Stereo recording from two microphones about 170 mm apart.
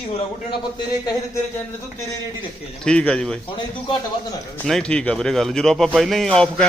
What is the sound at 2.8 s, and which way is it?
Speech, 5° left (ahead or behind).